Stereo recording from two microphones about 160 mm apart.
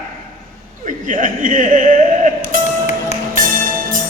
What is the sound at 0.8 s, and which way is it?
Speech, 55° right (ahead or behind).